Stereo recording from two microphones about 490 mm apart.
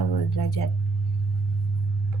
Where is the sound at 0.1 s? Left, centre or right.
Left.